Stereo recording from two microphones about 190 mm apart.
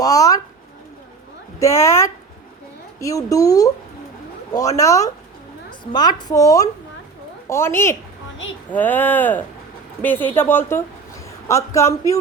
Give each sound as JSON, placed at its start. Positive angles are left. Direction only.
{"t": 0.0, "sound": "a woman's voice", "side_deg": 20}
{"t": 1.5, "sound": "speech", "side_deg": 15}
{"t": 4.8, "sound": "a woman's voice", "side_deg": 15}